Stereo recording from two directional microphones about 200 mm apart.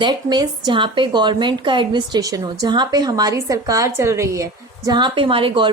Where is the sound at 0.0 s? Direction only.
20° right (ahead or behind).